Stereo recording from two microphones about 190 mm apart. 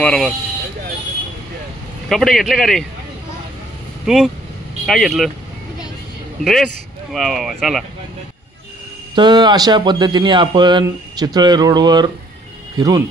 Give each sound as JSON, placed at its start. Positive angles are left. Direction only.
{"t": 0.0, "sound": "speech", "side_deg": 5}
{"t": 2.0, "sound": "speech", "side_deg": 0}
{"t": 4.0, "sound": "speech", "side_deg": 0}
{"t": 6.4, "sound": "speech", "side_deg": 0}
{"t": 9.1, "sound": "speech", "side_deg": -25}